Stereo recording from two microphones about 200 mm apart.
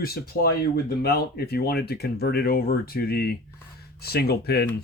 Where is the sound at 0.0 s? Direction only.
50° left (ahead or behind).